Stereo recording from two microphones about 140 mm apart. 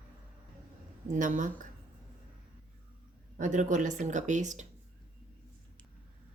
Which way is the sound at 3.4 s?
65° right (ahead or behind).